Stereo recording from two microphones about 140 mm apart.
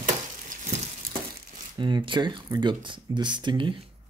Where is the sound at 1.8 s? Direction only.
35° right (ahead or behind).